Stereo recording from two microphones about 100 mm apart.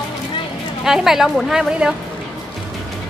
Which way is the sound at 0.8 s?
5° right (ahead or behind).